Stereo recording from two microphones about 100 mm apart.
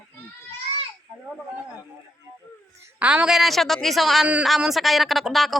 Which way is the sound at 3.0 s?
10° right (ahead or behind).